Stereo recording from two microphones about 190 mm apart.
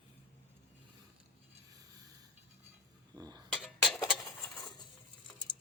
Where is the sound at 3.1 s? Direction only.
20° right (ahead or behind).